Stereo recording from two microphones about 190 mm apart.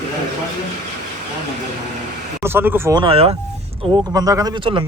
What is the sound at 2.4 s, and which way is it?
Speech, 10° right (ahead or behind).